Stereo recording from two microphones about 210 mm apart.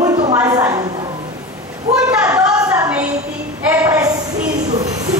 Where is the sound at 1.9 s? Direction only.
5° right (ahead or behind).